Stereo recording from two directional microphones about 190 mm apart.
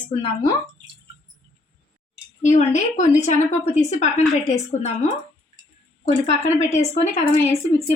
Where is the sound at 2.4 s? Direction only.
40° left (ahead or behind).